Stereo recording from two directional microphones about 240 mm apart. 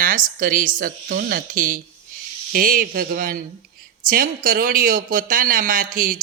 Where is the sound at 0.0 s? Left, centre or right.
Right.